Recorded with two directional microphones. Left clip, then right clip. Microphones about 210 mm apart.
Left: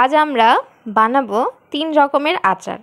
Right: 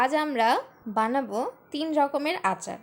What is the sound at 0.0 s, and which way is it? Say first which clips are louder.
A woman's voice: left 11 dB; 20° left (ahead or behind).